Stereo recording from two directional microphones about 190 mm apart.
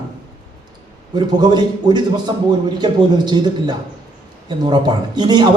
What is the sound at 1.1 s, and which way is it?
A man's voice, 20° right (ahead or behind).